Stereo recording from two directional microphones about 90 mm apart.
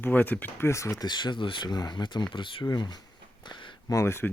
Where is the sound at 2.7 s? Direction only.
50° left (ahead or behind).